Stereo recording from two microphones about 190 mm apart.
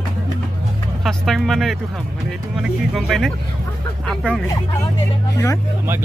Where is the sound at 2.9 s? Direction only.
Centre (ahead or behind).